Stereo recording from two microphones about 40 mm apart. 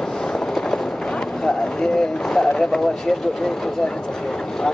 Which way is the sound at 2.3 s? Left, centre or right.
Centre.